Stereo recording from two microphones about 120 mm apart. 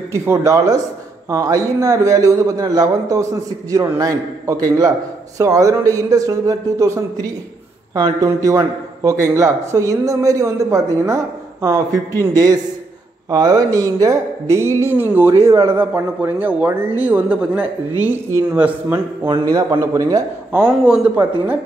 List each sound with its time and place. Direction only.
0.1 s a man's voice: 20° right (ahead or behind)
13.3 s a man's voice: 30° right (ahead or behind)
20.5 s speech: 15° right (ahead or behind)